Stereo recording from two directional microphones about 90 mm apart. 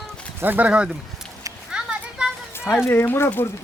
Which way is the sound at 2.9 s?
25° left (ahead or behind).